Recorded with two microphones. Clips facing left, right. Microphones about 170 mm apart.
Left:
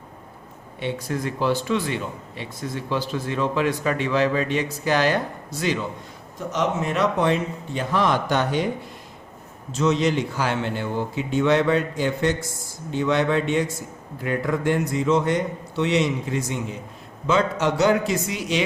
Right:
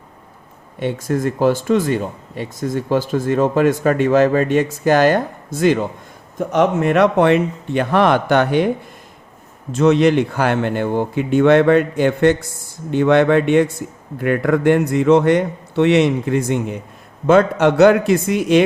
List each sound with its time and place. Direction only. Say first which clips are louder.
0.8 s a man's voice: right 7 dB; 45° right (ahead or behind)
9.7 s a man's voice: right 8 dB; 60° right (ahead or behind)